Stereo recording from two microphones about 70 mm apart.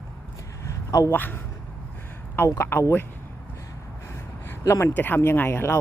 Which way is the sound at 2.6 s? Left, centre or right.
Left.